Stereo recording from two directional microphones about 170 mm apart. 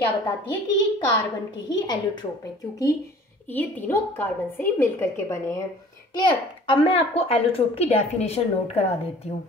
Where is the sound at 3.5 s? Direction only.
10° left (ahead or behind).